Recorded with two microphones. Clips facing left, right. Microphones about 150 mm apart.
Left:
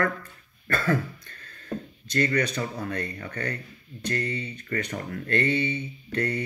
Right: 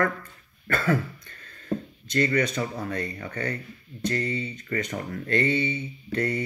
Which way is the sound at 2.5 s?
30° right (ahead or behind).